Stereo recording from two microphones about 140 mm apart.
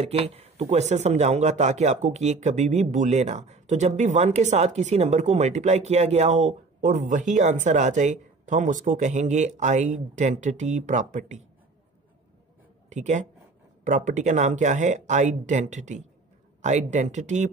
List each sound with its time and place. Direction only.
0.0 s speech: 45° right (ahead or behind)
12.9 s speech: 60° right (ahead or behind)